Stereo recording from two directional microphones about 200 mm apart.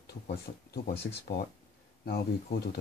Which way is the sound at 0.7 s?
50° left (ahead or behind).